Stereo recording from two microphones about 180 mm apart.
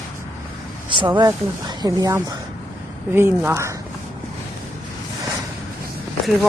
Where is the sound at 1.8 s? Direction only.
20° right (ahead or behind).